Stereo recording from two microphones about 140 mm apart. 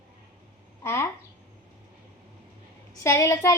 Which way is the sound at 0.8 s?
20° left (ahead or behind).